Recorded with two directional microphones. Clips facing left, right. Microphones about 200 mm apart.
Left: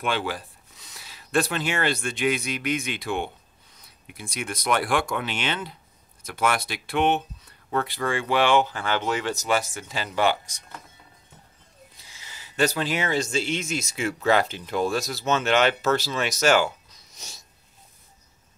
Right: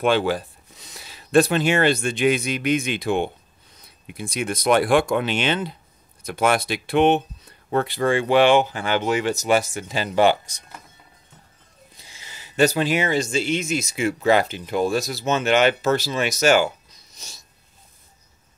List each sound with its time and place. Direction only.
0.0 s speech: 30° right (ahead or behind)
12.2 s speech: 20° right (ahead or behind)